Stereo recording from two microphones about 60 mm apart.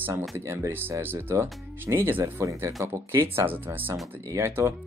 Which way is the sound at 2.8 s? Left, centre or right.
Right.